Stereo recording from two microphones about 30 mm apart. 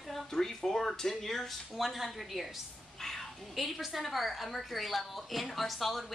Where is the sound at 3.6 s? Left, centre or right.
Centre.